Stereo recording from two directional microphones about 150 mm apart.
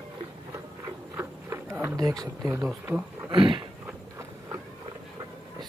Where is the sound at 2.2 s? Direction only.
25° right (ahead or behind).